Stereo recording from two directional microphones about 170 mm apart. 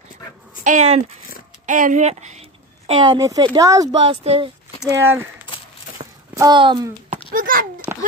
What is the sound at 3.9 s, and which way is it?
Speech, 35° right (ahead or behind).